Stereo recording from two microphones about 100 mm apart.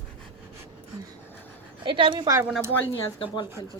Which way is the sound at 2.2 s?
30° right (ahead or behind).